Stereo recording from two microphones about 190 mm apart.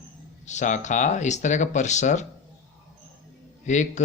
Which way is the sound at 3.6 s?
40° left (ahead or behind).